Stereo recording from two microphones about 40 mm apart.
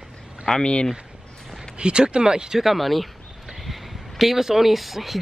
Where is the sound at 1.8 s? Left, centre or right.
Right.